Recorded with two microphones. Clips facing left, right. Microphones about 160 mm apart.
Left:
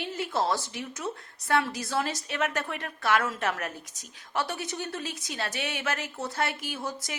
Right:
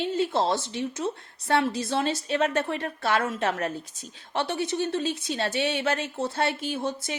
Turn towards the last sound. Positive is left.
turn(degrees=-25)  # may be behind; listen again after turning